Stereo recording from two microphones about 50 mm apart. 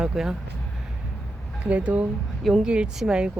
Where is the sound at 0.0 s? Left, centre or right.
Centre.